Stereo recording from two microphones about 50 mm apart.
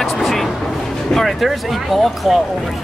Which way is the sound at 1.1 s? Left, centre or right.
Centre.